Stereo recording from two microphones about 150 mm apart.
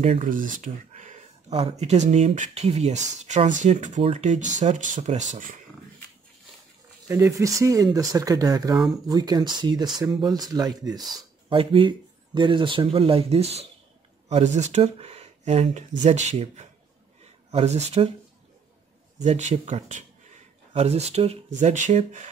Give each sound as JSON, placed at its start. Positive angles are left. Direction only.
{"t": 0.0, "sound": "speech", "side_deg": -55}
{"t": 1.6, "sound": "speech", "side_deg": -45}
{"t": 7.1, "sound": "speech", "side_deg": -20}
{"t": 19.1, "sound": "speech", "side_deg": -50}